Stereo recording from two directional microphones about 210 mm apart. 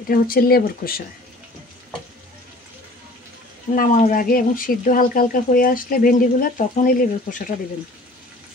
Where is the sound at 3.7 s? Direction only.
35° left (ahead or behind).